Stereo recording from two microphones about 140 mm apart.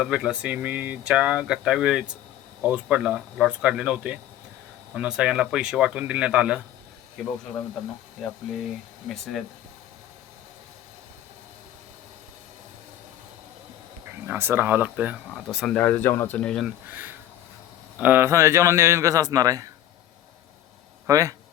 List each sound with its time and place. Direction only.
0.0 s speech: 5° right (ahead or behind)
14.3 s speech: 15° right (ahead or behind)
15.7 s speech: 10° left (ahead or behind)
16.8 s a man's voice: 15° right (ahead or behind)
21.1 s a man's voice: 25° right (ahead or behind)